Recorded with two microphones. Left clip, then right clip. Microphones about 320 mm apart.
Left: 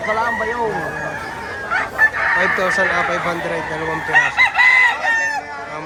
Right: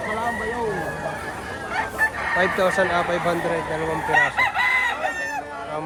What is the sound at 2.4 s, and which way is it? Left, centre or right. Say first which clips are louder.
Speech: right 1 dB; centre.